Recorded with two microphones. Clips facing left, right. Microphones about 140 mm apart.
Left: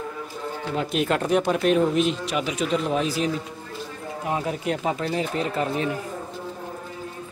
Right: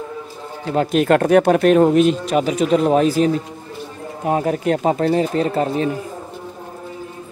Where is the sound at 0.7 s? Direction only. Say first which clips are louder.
Right 9 dB; 55° right (ahead or behind).